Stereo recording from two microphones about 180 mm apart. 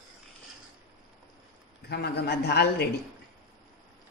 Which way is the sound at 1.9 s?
65° left (ahead or behind).